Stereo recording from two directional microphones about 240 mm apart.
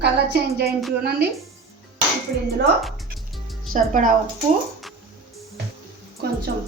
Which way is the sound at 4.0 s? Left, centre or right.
Right.